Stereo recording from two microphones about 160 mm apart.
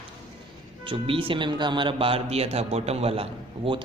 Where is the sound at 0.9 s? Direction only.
35° right (ahead or behind).